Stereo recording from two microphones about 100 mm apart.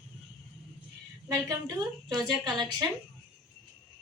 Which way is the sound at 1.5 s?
40° right (ahead or behind).